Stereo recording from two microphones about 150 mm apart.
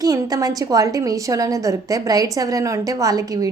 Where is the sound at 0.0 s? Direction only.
25° right (ahead or behind).